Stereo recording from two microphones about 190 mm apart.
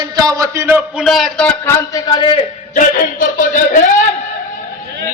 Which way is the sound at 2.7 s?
45° left (ahead or behind).